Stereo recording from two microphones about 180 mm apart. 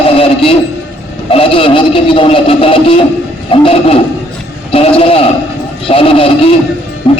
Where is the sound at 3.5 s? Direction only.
30° left (ahead or behind).